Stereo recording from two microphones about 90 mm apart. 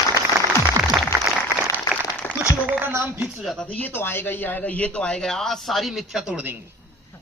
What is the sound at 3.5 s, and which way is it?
A man's voice, 15° left (ahead or behind).